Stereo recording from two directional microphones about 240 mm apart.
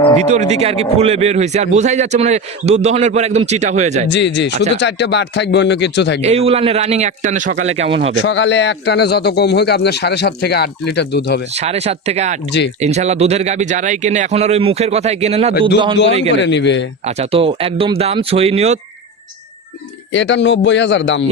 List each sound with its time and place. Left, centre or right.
0.2 s a man's voice: right
4.1 s a man's voice: left
6.2 s a man's voice: right
7.7 s a man's voice: right
8.2 s a man's voice: left
11.5 s a man's voice: right
16.3 s a man's voice: left
17.1 s a man's voice: right
20.1 s a man's voice: left